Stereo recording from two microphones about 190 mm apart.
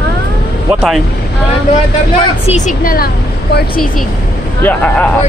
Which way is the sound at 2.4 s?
40° left (ahead or behind).